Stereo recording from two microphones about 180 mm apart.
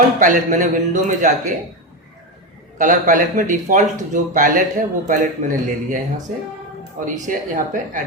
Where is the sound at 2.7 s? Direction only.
45° right (ahead or behind).